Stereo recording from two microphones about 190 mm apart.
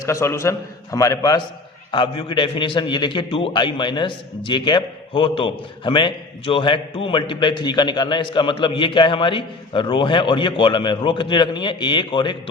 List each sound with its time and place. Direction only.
0.0 s a man's voice: 15° left (ahead or behind)